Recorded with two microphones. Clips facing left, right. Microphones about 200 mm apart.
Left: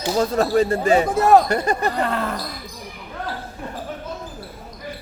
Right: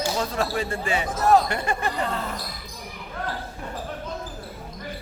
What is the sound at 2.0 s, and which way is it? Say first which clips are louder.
Speech: left 5 dB; 65° left (ahead or behind).